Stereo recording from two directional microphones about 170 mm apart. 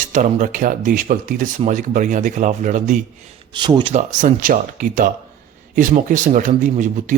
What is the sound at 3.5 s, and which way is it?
Speech, 25° right (ahead or behind).